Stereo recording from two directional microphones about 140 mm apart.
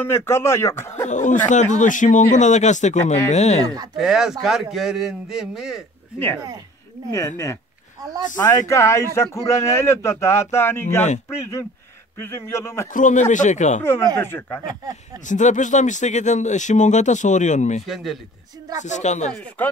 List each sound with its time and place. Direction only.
0.0 s speech: 15° left (ahead or behind)
1.0 s speech: 60° left (ahead or behind)
3.6 s speech: 30° right (ahead or behind)
3.9 s a man's voice: 5° right (ahead or behind)
6.1 s speech: 15° left (ahead or behind)
8.0 s speech: 25° right (ahead or behind)
8.4 s speech: 20° left (ahead or behind)
12.2 s speech: 20° left (ahead or behind)
12.9 s speech: 60° left (ahead or behind)
14.1 s speech: 15° left (ahead or behind)
15.1 s speech: 60° left (ahead or behind)
17.8 s a man's voice: centre (ahead or behind)
18.8 s speech: 60° left (ahead or behind)